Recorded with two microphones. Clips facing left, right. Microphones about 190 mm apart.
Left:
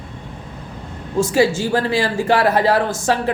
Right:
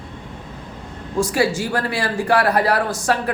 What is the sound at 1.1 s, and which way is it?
A man's voice, 25° left (ahead or behind).